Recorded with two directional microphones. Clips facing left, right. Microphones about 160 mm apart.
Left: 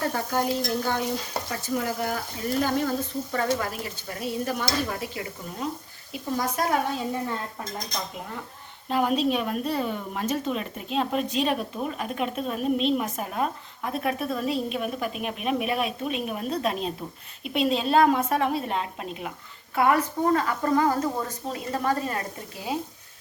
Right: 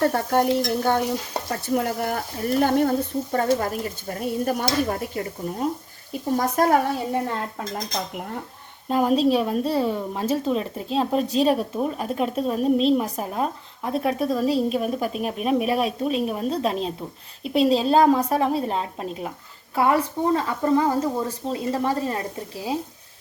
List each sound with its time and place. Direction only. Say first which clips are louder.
0.3 s speech: right 6 dB; 60° right (ahead or behind)
0.8 s speech: right 5 dB; 50° right (ahead or behind)
3.3 s speech: right 5 dB; 40° right (ahead or behind)
8.9 s a woman's voice: right 4 dB; 35° right (ahead or behind)